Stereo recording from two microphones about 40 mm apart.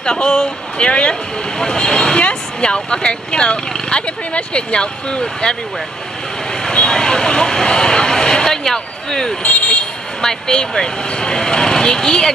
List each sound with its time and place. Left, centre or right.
0.0 s speech: left
1.6 s speech: centre
2.1 s speech: left
6.6 s vehicle: left
6.9 s speech: centre
9.4 s speech: left
9.7 s speech: left